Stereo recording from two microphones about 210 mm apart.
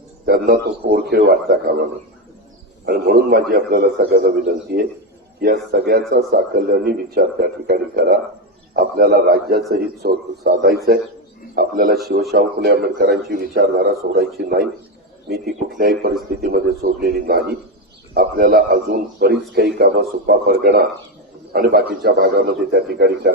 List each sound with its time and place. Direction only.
0.3 s speech: 45° right (ahead or behind)
2.8 s speech: 50° right (ahead or behind)